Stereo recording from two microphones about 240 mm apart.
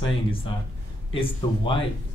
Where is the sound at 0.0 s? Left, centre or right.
Left.